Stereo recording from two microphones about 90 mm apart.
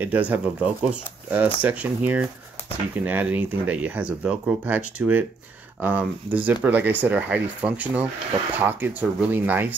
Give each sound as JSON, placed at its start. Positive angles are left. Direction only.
{"t": 0.0, "sound": "speech", "side_deg": -15}